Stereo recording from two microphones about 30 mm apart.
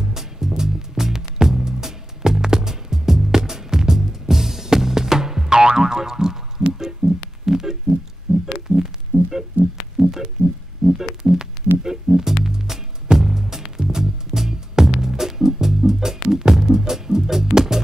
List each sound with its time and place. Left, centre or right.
0.0 s music: centre
6.8 s a sound: centre
7.4 s heart sounds: centre
8.5 s music: centre
9.8 s hum: centre
10.4 s music: centre